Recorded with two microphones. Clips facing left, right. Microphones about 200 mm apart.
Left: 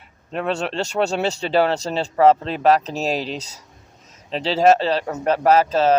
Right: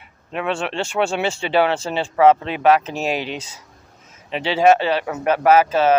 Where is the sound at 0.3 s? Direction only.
40° left (ahead or behind).